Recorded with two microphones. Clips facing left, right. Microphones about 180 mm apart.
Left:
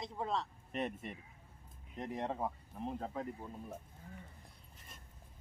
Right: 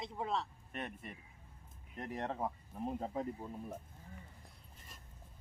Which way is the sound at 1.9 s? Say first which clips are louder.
Left 1 dB; 15° left (ahead or behind).